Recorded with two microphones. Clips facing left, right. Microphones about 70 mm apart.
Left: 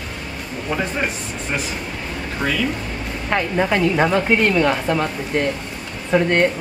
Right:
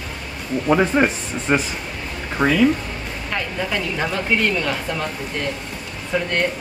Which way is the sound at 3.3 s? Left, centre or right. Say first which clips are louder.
Left 6 dB; left.